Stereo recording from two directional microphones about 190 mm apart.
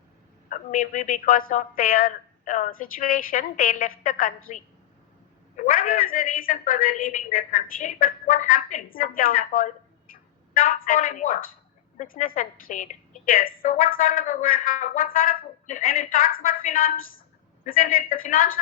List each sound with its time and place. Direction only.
0.5 s a woman's voice: 45° left (ahead or behind)